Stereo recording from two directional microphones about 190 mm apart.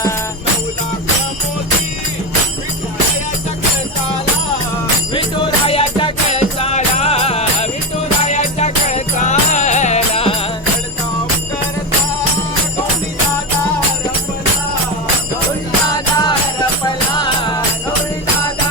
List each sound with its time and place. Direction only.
5.6 s music: 30° left (ahead or behind)
15.9 s music: 20° left (ahead or behind)